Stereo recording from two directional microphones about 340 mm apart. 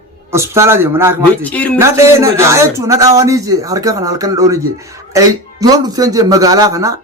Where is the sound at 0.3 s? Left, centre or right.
Centre.